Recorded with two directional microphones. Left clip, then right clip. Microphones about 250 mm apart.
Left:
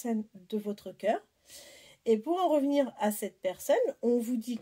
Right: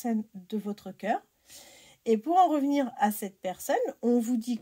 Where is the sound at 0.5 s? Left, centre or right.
Right.